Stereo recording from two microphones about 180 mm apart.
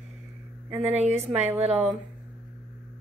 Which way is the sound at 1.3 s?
10° right (ahead or behind).